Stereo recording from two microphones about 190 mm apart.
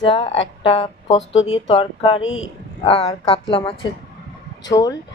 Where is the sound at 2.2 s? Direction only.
90° left.